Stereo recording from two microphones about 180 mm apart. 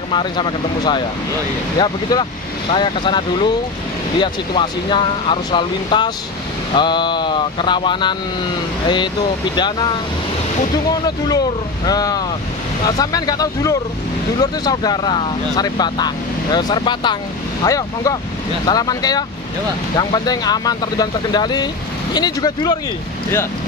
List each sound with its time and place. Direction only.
0.1 s speech: 25° left (ahead or behind)
11.1 s speech: 20° left (ahead or behind)